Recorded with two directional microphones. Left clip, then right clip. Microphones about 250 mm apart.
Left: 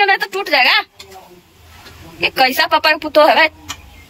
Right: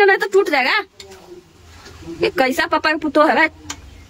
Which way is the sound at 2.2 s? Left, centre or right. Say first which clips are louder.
Left 3 dB; centre.